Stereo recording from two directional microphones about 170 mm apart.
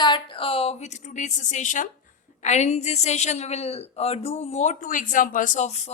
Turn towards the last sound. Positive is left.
turn(degrees=40)  # may be behind; listen again after turning